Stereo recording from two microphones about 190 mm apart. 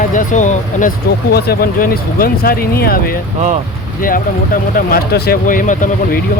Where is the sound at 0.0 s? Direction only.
45° left (ahead or behind).